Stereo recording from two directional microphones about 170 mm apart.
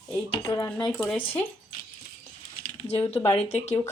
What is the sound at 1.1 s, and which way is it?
Speech, 30° left (ahead or behind).